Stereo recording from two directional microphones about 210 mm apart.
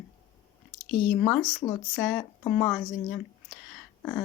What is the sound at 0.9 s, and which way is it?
Speech, 35° left (ahead or behind).